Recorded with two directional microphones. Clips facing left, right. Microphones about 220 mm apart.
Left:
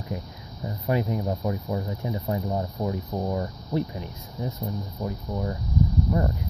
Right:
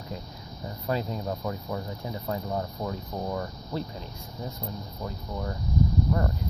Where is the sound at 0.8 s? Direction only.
15° left (ahead or behind).